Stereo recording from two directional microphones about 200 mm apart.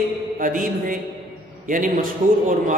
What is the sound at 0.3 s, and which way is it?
A man's voice, 45° right (ahead or behind).